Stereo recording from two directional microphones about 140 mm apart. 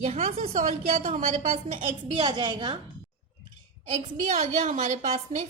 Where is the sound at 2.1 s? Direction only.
35° right (ahead or behind).